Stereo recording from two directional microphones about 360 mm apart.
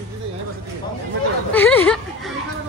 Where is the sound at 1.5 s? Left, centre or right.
Centre.